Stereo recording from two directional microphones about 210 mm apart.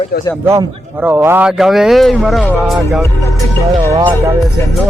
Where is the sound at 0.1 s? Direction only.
50° left (ahead or behind).